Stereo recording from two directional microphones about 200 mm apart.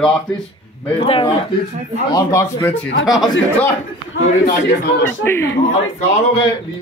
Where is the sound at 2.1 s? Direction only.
15° left (ahead or behind).